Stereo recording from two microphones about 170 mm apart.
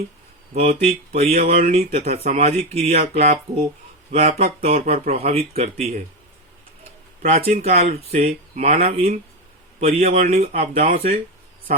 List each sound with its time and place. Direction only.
0.5 s speech: 40° right (ahead or behind)
7.2 s speech: 40° right (ahead or behind)